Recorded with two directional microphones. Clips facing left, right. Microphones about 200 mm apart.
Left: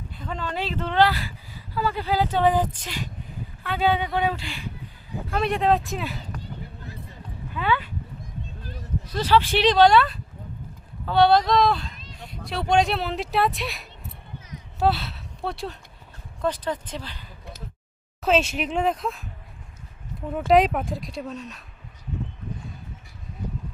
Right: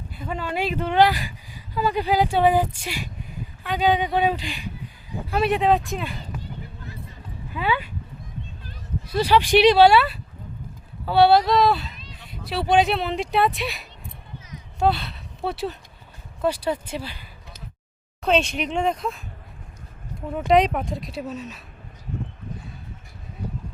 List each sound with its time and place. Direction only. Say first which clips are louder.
0.1 s speech: right 3 dB; 10° right (ahead or behind)
5.3 s speech: right 2 dB; 5° right (ahead or behind)
7.5 s speech: even; 10° right (ahead or behind)
9.0 s speech: right 2 dB; 10° right (ahead or behind)
11.9 s a sound: left 2 dB; 45° left (ahead or behind)
12.3 s speech: right 2 dB; 5° right (ahead or behind)
18.2 s speech: even; 5° left (ahead or behind)
20.5 s speech: even; centre (ahead or behind)